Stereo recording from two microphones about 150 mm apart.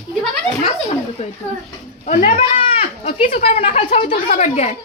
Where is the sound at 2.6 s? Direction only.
40° left (ahead or behind).